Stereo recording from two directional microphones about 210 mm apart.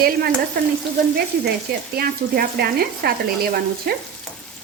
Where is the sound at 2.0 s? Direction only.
45° right (ahead or behind).